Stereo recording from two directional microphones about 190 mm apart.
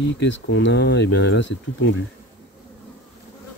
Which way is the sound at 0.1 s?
65° left (ahead or behind).